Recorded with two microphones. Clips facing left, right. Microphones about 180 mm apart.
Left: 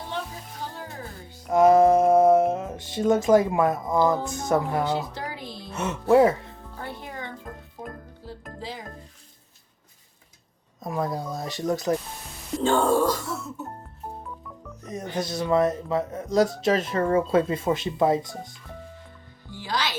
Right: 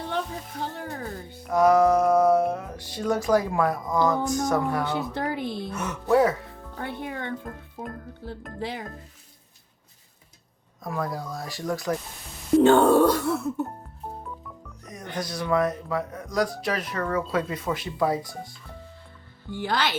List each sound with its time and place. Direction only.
0.6 s music: 60° right (ahead or behind)
1.5 s music: 25° left (ahead or behind)
4.9 s a sound: 55° right (ahead or behind)
5.7 s speech: 25° left (ahead or behind)
6.7 s music: 60° right (ahead or behind)
8.5 s speech: 60° right (ahead or behind)
10.8 s speech: 20° left (ahead or behind)
12.5 s speech: 65° right (ahead or behind)
15.1 s speech: 25° left (ahead or behind)
19.5 s speech: 55° right (ahead or behind)